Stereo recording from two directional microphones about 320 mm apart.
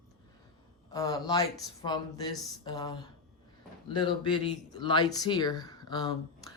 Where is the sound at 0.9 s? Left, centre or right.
Centre.